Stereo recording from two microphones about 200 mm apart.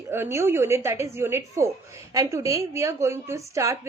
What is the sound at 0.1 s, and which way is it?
A woman's voice, 10° right (ahead or behind).